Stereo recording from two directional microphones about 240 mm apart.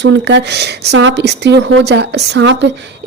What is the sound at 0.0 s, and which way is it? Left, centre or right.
Speech, right.